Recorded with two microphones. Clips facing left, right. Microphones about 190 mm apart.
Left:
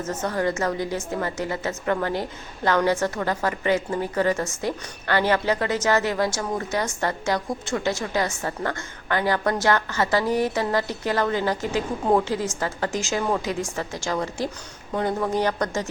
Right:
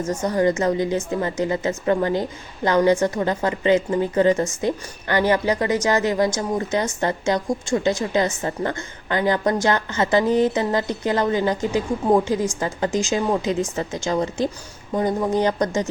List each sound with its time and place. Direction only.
0.0 s a woman's voice: 15° right (ahead or behind)